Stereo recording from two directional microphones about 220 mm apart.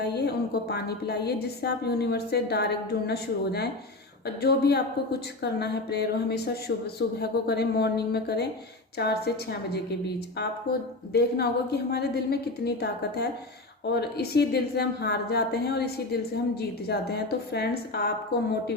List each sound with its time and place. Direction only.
0.0 s a woman's voice: 50° left (ahead or behind)
11.1 s a woman's voice: 45° left (ahead or behind)